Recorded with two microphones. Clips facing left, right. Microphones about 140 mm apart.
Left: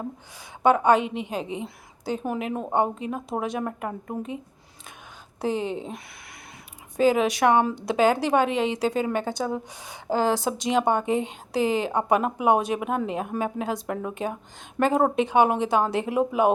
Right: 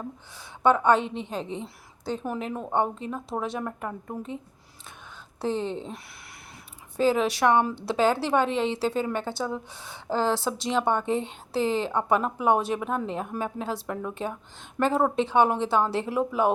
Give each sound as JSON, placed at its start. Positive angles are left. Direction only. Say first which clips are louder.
{"t": 0.6, "sound": "a woman's voice", "louder": "left 2 dB", "side_deg": 15}
{"t": 5.4, "sound": "a woman's voice", "louder": "left 2 dB", "side_deg": 10}